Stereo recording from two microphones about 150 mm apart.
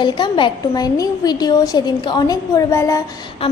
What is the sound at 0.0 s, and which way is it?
A woman's voice, 30° left (ahead or behind).